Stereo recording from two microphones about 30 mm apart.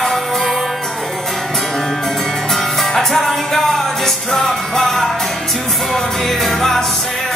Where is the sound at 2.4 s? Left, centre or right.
Centre.